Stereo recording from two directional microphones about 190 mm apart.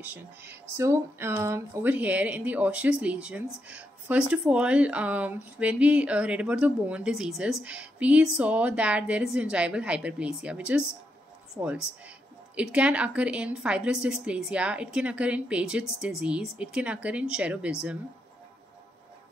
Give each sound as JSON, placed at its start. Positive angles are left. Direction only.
{"t": 0.0, "sound": "a woman's voice", "side_deg": -10}